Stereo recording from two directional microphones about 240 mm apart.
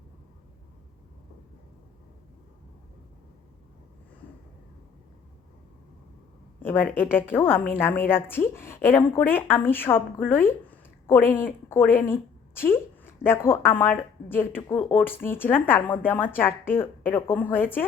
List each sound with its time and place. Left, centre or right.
6.6 s a woman's voice: centre